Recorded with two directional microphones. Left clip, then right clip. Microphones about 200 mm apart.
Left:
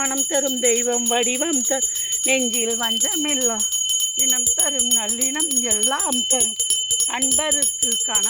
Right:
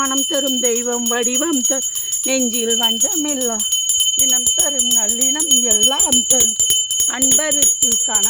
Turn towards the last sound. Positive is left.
turn(degrees=-5)  # may be behind; listen again after turning